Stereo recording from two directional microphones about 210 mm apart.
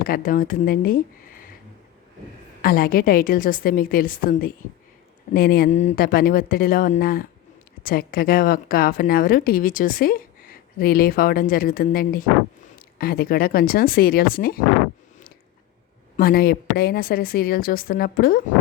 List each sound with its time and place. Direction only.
0.0 s speech: 45° left (ahead or behind)
2.6 s a woman's voice: 45° left (ahead or behind)
16.1 s a woman's voice: 45° left (ahead or behind)